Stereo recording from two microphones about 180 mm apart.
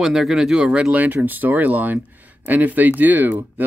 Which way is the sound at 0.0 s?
Centre (ahead or behind).